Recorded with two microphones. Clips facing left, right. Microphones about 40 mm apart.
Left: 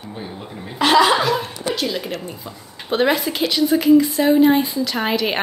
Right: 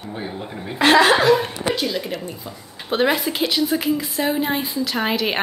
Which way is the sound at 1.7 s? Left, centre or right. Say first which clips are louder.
Even; centre.